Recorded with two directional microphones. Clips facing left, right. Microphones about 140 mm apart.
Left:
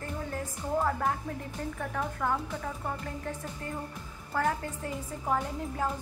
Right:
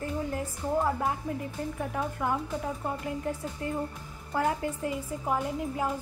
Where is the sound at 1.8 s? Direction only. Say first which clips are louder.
Right 1 dB; 15° right (ahead or behind).